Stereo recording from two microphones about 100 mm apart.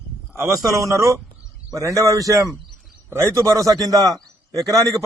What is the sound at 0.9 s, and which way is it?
A man's voice, 35° right (ahead or behind).